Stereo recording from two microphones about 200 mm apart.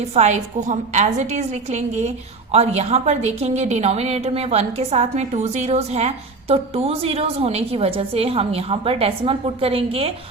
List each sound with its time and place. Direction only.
0.1 s a woman's voice: 35° right (ahead or behind)